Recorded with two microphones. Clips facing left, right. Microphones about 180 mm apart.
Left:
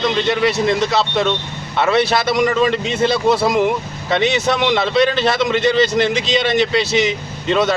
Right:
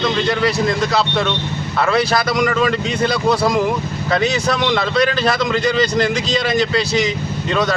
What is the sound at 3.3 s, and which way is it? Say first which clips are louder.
Speech: right 1 dB; centre (ahead or behind).